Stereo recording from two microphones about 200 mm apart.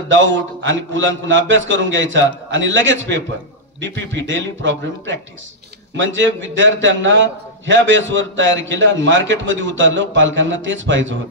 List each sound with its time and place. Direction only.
0.1 s a man's voice: 70° right (ahead or behind)